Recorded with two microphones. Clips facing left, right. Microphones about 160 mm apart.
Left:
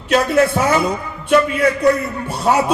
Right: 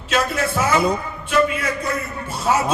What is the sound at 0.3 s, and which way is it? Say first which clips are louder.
Speech: left 7 dB; 60° left (ahead or behind).